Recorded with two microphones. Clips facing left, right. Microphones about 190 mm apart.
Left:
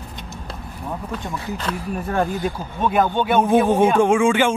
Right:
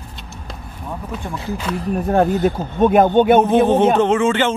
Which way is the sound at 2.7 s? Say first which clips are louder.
Right 7 dB; 50° right (ahead or behind).